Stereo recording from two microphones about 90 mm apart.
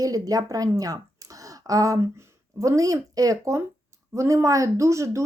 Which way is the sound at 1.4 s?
40° right (ahead or behind).